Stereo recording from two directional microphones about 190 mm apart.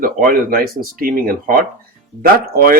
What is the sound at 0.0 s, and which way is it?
Speech, 50° right (ahead or behind).